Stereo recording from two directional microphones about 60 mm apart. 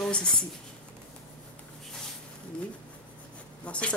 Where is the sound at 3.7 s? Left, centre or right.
Centre.